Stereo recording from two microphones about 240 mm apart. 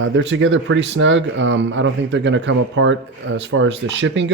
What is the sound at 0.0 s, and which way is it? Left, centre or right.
Speech, right.